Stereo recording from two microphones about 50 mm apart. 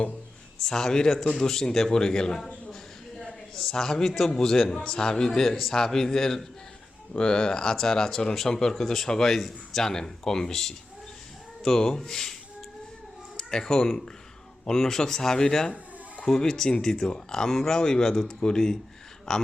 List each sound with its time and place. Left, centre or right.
0.6 s a man's voice: centre